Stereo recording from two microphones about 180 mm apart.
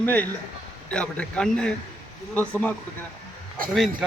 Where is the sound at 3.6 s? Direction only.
50° right (ahead or behind).